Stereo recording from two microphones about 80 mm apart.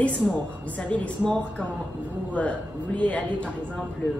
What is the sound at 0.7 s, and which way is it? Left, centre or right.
Speech, centre.